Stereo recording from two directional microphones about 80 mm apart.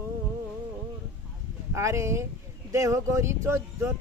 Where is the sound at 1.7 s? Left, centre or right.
Right.